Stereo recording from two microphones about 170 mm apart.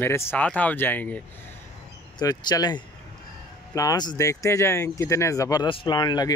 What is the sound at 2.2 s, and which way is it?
Speech, 20° left (ahead or behind).